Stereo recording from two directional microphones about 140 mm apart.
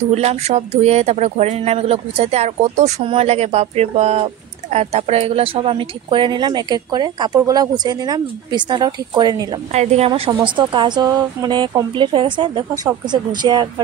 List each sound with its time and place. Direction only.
0.1 s speech: 50° right (ahead or behind); by 9.5 s 30° right (ahead or behind)
9.7 s speech: 50° right (ahead or behind); by 13.7 s 30° right (ahead or behind)